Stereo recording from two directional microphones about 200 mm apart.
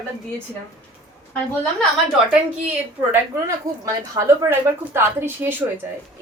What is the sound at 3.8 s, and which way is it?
A woman's voice, 15° right (ahead or behind).